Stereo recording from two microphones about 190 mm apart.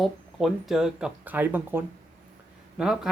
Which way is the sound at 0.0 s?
Centre (ahead or behind).